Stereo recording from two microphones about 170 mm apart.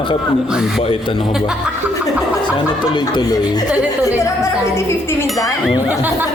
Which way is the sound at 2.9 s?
25° left (ahead or behind).